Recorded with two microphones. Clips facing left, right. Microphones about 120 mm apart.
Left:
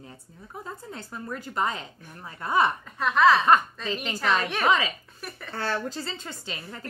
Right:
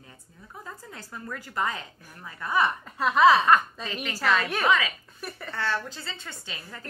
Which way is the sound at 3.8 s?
25° left (ahead or behind).